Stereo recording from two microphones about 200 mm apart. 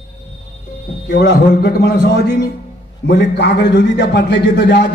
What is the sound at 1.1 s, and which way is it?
Tabla, 55° left (ahead or behind).